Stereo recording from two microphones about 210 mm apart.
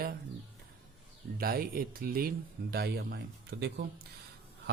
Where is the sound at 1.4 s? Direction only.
45° right (ahead or behind).